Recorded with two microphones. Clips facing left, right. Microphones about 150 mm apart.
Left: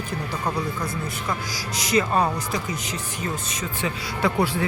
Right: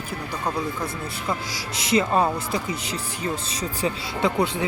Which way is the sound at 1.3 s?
25° right (ahead or behind).